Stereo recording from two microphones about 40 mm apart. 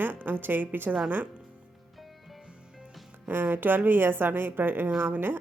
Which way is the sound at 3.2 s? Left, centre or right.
Right.